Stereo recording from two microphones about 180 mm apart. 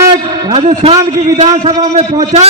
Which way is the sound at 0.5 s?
35° right (ahead or behind).